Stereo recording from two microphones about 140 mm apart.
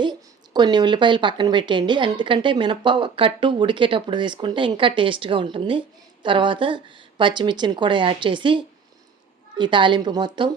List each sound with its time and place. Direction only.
0.0 s a woman's voice: 30° right (ahead or behind)